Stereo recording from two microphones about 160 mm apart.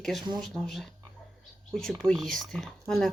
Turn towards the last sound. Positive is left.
turn(degrees=5)  # may be behind; listen again after turning